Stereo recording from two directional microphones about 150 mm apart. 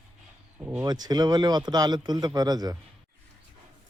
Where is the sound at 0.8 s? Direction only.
25° right (ahead or behind).